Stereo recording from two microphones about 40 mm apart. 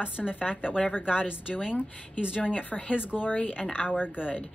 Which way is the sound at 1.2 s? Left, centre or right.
Left.